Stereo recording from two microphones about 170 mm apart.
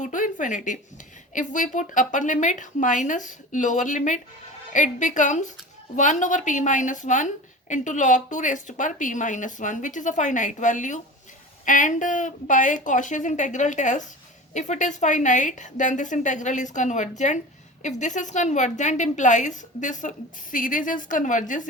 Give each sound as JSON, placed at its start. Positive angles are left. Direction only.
{"t": 0.0, "sound": "a woman's voice", "side_deg": 50}